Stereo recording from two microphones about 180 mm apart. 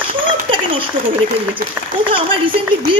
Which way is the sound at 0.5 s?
30° right (ahead or behind).